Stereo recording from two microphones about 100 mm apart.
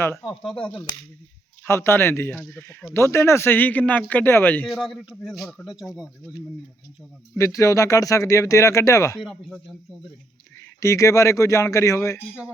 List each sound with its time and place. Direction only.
0.4 s speech: 10° left (ahead or behind)
1.6 s speech: 25° left (ahead or behind)
4.7 s speech: centre (ahead or behind)
7.3 s speech: 35° left (ahead or behind)
9.1 s speech: centre (ahead or behind)
10.8 s speech: 30° left (ahead or behind)